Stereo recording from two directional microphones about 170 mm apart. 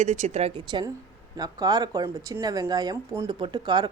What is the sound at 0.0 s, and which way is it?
A woman's voice, 40° right (ahead or behind).